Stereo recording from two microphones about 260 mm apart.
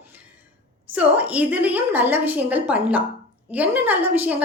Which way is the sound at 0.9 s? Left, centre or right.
Centre.